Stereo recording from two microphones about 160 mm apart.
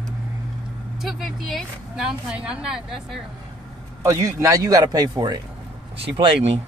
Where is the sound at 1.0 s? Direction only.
Centre (ahead or behind).